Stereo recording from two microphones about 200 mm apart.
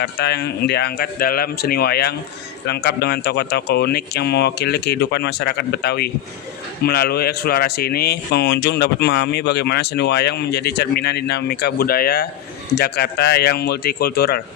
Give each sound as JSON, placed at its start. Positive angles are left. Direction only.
{"t": 0.0, "sound": "speech", "side_deg": 55}